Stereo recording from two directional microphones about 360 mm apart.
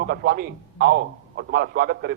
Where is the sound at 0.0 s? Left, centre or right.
Right.